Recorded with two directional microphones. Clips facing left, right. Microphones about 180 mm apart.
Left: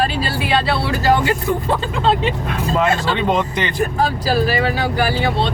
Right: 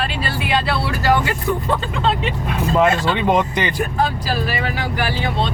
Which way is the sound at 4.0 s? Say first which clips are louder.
Left 4 dB; 35° left (ahead or behind).